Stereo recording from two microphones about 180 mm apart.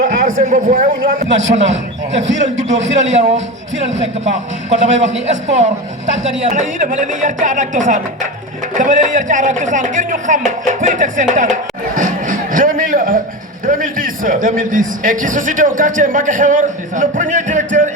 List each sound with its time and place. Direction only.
0.0 s a man's voice: 45° right (ahead or behind)